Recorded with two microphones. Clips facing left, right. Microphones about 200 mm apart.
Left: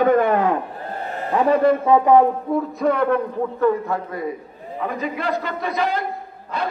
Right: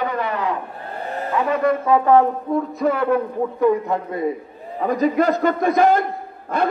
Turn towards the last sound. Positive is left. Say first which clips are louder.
# right 5 dB
turn(degrees=-50)  # may be behind; listen again after turning